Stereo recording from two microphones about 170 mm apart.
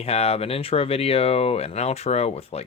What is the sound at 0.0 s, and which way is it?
Speech, 35° left (ahead or behind).